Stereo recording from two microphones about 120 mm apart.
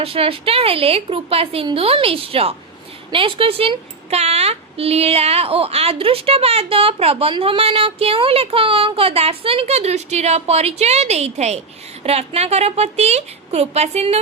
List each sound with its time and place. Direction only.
0.0 s a woman's voice: 50° right (ahead or behind)